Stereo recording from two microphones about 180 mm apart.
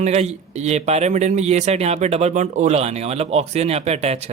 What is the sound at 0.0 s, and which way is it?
Speech, 40° right (ahead or behind).